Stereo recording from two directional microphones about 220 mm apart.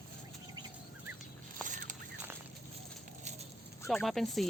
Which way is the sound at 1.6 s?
35° right (ahead or behind).